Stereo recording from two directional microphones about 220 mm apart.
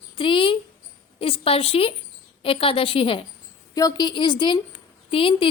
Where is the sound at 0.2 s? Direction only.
25° left (ahead or behind).